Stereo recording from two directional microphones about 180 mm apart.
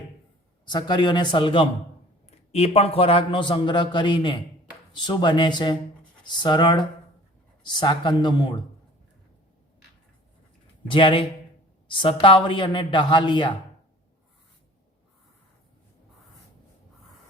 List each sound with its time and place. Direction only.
0.6 s a man's voice: 25° left (ahead or behind)
10.8 s a man's voice: 30° left (ahead or behind)